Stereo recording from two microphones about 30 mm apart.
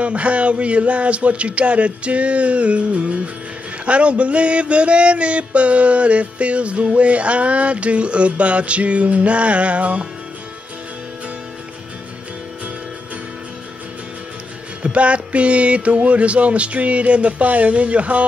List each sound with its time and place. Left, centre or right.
0.0 s music: right
14.8 s music: right